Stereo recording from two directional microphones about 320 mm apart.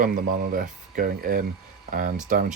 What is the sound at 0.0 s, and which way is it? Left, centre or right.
Speech, right.